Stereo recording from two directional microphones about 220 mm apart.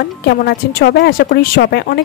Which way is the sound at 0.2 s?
50° left (ahead or behind).